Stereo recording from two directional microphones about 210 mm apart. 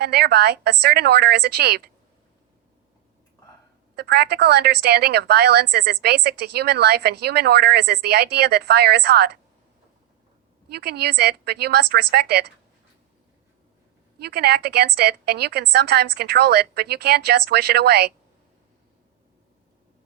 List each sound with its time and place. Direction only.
0.0 s a woman's voice: 50° right (ahead or behind)
3.9 s a woman's voice: 50° right (ahead or behind)
10.7 s a woman's voice: 50° right (ahead or behind)
14.2 s a woman's voice: 50° right (ahead or behind)